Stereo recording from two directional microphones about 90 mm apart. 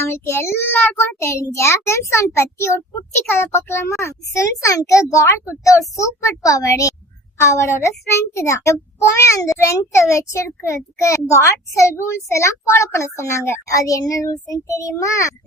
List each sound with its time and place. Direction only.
0.0 s a child's voice: 25° left (ahead or behind)